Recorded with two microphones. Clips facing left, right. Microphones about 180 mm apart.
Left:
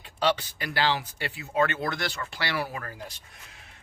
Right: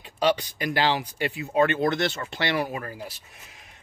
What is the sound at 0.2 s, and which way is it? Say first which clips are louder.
Speech: right 3 dB; 15° right (ahead or behind).